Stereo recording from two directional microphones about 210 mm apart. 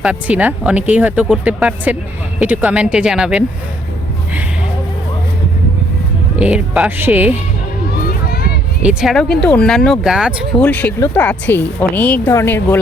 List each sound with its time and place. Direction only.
0.0 s speech: 5° right (ahead or behind)
6.4 s speech: 5° right (ahead or behind)
8.3 s a sound: 45° left (ahead or behind)
8.8 s speech: 5° right (ahead or behind)
10.7 s speech: 5° left (ahead or behind)